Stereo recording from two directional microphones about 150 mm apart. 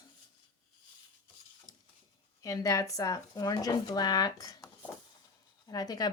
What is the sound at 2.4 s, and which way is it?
Speech, 25° left (ahead or behind).